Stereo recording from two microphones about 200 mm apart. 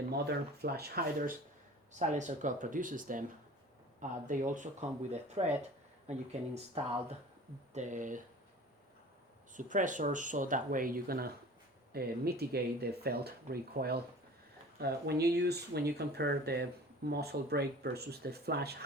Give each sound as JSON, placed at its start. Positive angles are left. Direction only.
{"t": 0.1, "sound": "speech", "side_deg": -55}
{"t": 1.9, "sound": "speech", "side_deg": -35}
{"t": 4.3, "sound": "speech", "side_deg": -40}
{"t": 9.6, "sound": "speech", "side_deg": -40}